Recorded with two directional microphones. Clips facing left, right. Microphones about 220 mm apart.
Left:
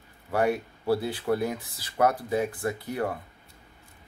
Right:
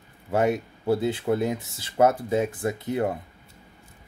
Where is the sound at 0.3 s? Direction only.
20° right (ahead or behind).